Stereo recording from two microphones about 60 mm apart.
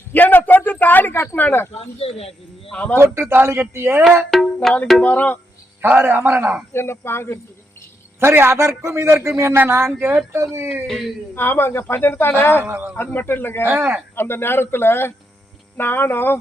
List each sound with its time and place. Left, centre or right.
0.1 s a sound: left
1.1 s speech: left
2.7 s speech: left
3.0 s a man's voice: right
4.3 s music: centre
5.0 s speech: left
5.8 s a man's voice: right
6.7 s speech: left
8.2 s a man's voice: right
10.8 s speech: centre
11.3 s speech: left
13.7 s a man's voice: right
14.2 s speech: left